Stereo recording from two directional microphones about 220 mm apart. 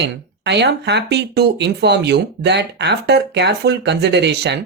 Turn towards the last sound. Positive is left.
turn(degrees=-50)  # may be behind; listen again after turning